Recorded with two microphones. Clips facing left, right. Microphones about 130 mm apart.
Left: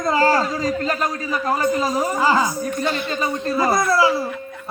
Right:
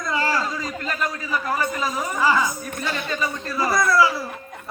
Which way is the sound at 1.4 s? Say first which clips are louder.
Left 7 dB; 30° left (ahead or behind).